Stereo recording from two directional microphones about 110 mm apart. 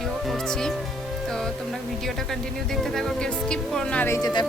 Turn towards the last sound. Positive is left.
turn(degrees=40)  # may be behind; listen again after turning